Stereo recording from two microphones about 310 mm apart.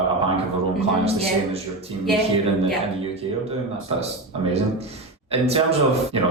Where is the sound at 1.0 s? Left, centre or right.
Centre.